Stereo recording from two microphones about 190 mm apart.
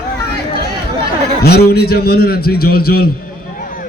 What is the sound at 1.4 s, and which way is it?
A man's voice, 55° left (ahead or behind).